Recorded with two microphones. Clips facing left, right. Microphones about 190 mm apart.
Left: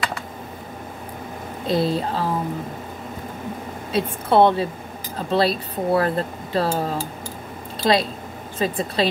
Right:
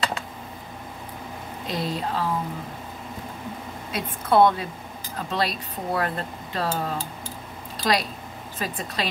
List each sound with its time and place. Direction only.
1.7 s speech: 30° left (ahead or behind)
3.9 s a woman's voice: 30° left (ahead or behind)